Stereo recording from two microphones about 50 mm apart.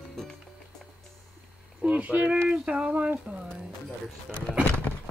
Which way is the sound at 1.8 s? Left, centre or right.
Right.